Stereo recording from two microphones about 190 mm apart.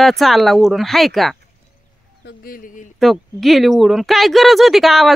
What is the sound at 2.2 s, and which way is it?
Speech, 55° left (ahead or behind).